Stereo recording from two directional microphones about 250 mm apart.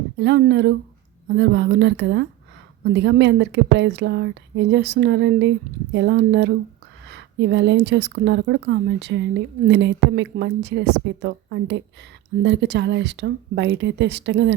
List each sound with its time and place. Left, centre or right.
0.2 s speech: right